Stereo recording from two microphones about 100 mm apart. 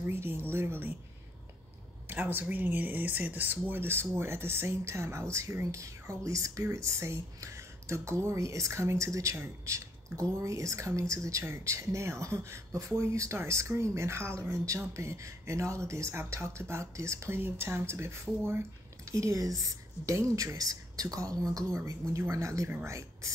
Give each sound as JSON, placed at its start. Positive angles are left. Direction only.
{"t": 0.0, "sound": "speech", "side_deg": -25}
{"t": 2.0, "sound": "speech", "side_deg": -20}